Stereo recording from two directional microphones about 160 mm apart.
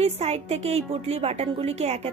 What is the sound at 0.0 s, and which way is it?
A woman's voice, 40° right (ahead or behind).